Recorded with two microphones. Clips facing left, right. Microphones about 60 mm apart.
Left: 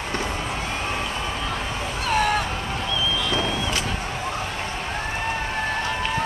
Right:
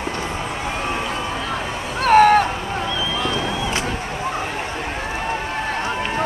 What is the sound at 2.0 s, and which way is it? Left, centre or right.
Vehicle, right.